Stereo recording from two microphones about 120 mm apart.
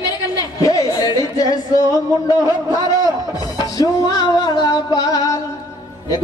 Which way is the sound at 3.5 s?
30° left (ahead or behind).